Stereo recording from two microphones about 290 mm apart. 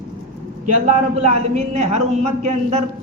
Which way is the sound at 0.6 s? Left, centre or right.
Right.